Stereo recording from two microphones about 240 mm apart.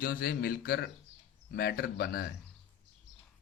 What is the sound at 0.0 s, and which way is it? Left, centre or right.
Speech, left.